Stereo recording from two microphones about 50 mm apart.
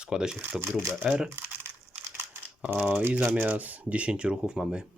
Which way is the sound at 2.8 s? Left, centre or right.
Right.